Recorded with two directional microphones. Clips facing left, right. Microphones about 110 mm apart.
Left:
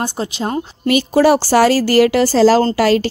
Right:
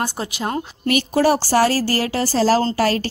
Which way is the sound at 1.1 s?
90° left.